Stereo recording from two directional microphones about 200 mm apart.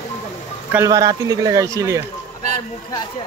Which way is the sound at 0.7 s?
15° right (ahead or behind).